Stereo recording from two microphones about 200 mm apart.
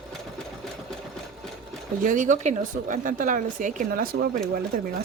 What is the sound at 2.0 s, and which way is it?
Speech, 40° right (ahead or behind).